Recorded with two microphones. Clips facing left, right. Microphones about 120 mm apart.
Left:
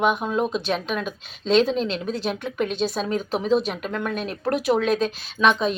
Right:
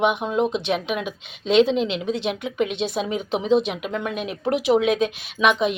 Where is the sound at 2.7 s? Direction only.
70° right (ahead or behind).